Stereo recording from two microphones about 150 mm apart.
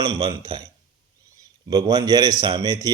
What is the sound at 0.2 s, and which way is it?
A man's voice, 35° right (ahead or behind).